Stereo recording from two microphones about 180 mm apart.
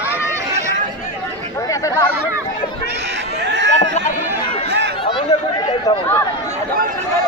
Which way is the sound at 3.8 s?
40° left (ahead or behind).